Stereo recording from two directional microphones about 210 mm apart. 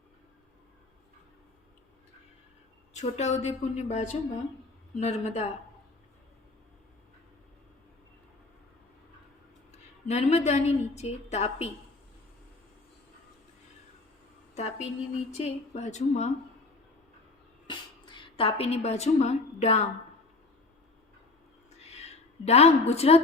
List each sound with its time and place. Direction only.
2.9 s a woman's voice: 30° left (ahead or behind)
9.7 s a woman's voice: 30° left (ahead or behind)
14.5 s a woman's voice: 30° left (ahead or behind)
17.7 s a woman's voice: 20° left (ahead or behind)
21.8 s a sound: 30° left (ahead or behind)